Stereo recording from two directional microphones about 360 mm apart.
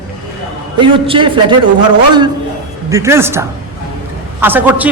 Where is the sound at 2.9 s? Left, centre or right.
Centre.